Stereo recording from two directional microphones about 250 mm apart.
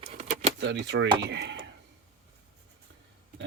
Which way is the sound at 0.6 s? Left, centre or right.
Right.